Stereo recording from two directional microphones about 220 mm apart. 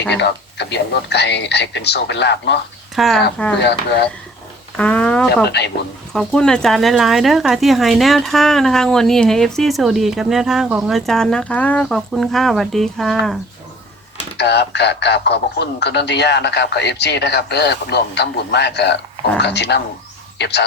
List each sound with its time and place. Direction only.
0.1 s a man's voice: 50° left (ahead or behind)
2.9 s speech: centre (ahead or behind)
3.6 s a man's voice: 50° left (ahead or behind)
4.8 s speech: 5° left (ahead or behind)
14.3 s a man's voice: 50° left (ahead or behind)